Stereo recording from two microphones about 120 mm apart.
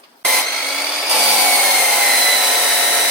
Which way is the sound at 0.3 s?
Centre (ahead or behind).